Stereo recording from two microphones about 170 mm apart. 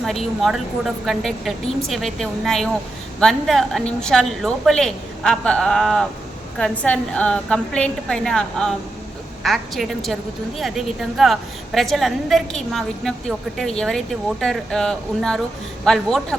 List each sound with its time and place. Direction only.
0.0 s a woman's voice: centre (ahead or behind)